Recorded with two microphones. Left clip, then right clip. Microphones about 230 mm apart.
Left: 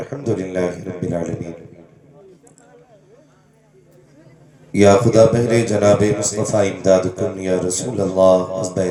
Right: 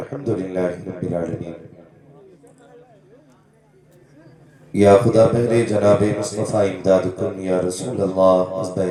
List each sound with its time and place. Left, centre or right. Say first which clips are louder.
0.0 s a man's voice: left 1 dB; left
4.7 s a man's voice: left 1 dB; left